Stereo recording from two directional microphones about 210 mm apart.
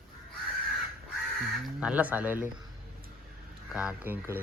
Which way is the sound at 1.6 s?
5° right (ahead or behind).